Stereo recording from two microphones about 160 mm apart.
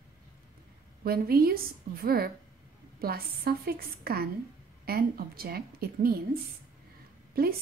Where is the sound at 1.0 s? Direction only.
70° right (ahead or behind).